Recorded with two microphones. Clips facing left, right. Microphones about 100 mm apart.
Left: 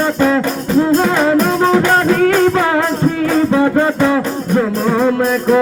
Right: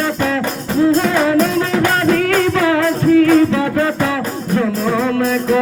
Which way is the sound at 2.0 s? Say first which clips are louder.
Left 3 dB; 25° left (ahead or behind).